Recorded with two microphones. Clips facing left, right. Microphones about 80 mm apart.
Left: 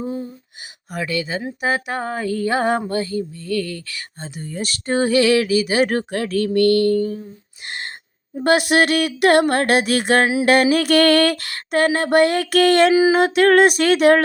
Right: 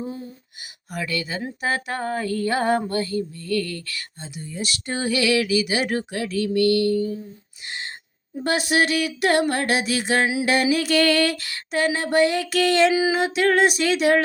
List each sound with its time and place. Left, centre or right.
0.0 s a sound: left
0.9 s female singing: left
4.2 s speech: left
8.4 s a sound: left
10.4 s speech: left
12.9 s music: left
13.1 s speech: left